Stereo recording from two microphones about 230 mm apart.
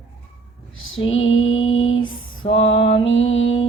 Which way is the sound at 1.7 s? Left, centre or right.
Left.